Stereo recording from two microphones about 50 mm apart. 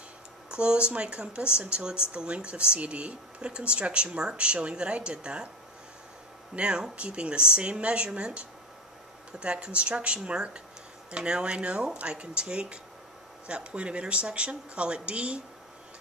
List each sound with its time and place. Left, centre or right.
0.5 s speech: right
6.5 s speech: centre